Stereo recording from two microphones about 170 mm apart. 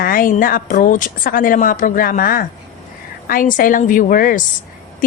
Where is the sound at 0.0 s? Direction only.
55° left (ahead or behind).